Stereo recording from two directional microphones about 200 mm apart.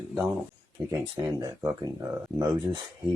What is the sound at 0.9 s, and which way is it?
Speech, 15° right (ahead or behind).